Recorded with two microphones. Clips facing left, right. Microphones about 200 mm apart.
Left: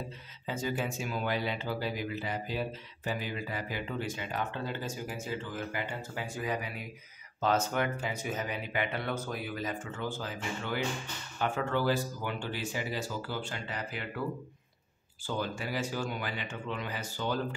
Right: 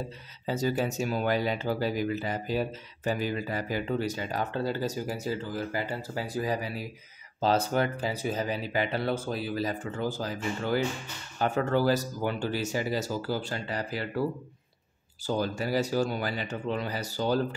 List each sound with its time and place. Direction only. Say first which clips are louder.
0.5 s speech: right 6 dB; 40° right (ahead or behind)
15.2 s speech: right 6 dB; 40° right (ahead or behind)